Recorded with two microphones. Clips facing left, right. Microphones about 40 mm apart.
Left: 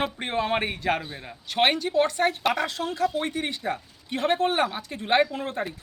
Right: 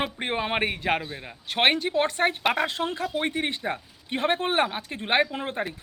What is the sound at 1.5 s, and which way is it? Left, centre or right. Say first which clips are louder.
A man's voice: even; right.